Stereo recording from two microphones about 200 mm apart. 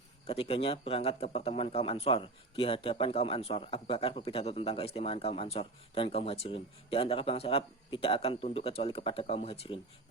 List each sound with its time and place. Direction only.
0.3 s a man's voice: 30° left (ahead or behind)